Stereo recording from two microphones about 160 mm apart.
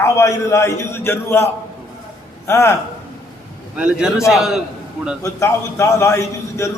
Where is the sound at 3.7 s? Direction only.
5° right (ahead or behind).